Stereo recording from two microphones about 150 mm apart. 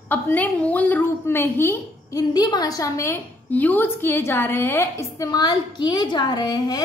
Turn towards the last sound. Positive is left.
turn(degrees=25)  # may be behind; listen again after turning